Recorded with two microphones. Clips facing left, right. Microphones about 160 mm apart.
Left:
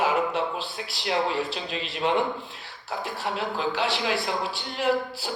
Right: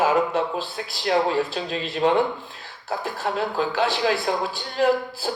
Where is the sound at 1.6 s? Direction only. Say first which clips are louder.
Right 5 dB; 45° right (ahead or behind).